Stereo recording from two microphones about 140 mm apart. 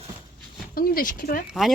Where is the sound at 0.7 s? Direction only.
90° left.